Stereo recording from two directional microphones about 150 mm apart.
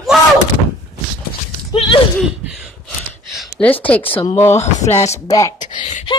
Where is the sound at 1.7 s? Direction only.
40° left (ahead or behind).